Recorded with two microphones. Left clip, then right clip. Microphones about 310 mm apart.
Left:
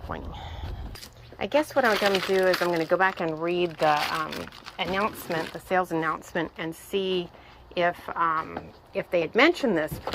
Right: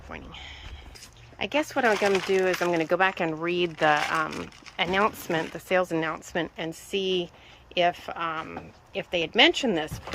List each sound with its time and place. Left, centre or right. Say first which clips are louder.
1.4 s speech: left 2 dB; centre